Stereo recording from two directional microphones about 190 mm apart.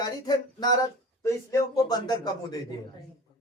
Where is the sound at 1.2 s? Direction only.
20° left (ahead or behind).